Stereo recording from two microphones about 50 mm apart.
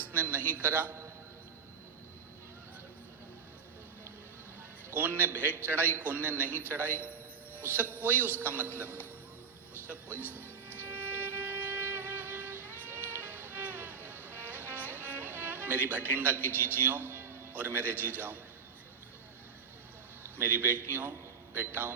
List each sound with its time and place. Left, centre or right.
0.0 s a man's voice: right
4.9 s a man's voice: right
9.8 s music: right
16.5 s a man's voice: right
17.1 s music: right
17.5 s a man's voice: right
20.2 s a man's voice: right